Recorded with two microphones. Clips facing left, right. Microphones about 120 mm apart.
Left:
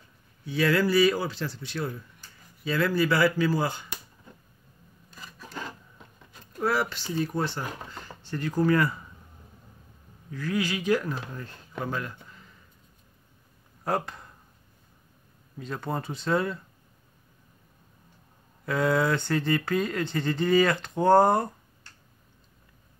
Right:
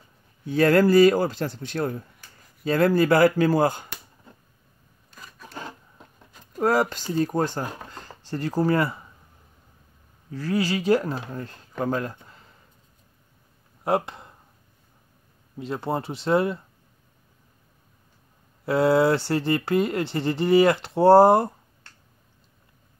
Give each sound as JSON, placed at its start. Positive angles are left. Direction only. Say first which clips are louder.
{"t": 0.5, "sound": "speech", "louder": "right 6 dB", "side_deg": -45}
{"t": 6.6, "sound": "speech", "louder": "right 5 dB", "side_deg": -40}
{"t": 7.9, "sound": "a sound", "louder": "even", "side_deg": -35}
{"t": 8.3, "sound": "speech", "louder": "right 1 dB", "side_deg": -35}
{"t": 10.3, "sound": "speech", "louder": "right 4 dB", "side_deg": -35}
{"t": 13.8, "sound": "speech", "louder": "right 5 dB", "side_deg": -25}
{"t": 15.5, "sound": "speech", "louder": "right 5 dB", "side_deg": -25}
{"t": 18.7, "sound": "speech", "louder": "right 5 dB", "side_deg": -30}